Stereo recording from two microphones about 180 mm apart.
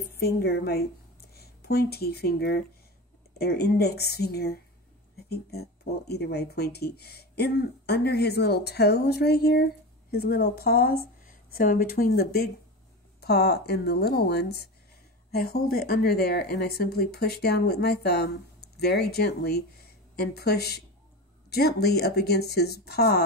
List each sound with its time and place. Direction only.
0.2 s speech: 60° left (ahead or behind)